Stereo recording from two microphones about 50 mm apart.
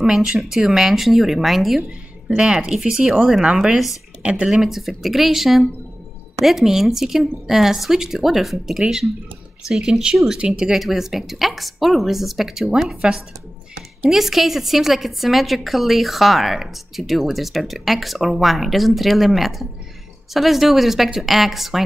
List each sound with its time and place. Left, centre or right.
0.0 s a woman's voice: centre
2.2 s speech: centre
3.6 s a woman's voice: centre
4.2 s speech: right
4.5 s a woman's voice: centre